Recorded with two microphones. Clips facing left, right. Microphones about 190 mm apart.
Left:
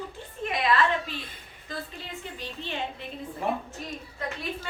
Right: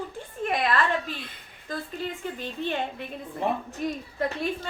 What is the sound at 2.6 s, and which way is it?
Speech, 50° right (ahead or behind).